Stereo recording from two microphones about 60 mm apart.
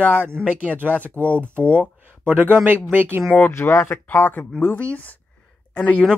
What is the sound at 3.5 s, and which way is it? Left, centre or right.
Speech, left.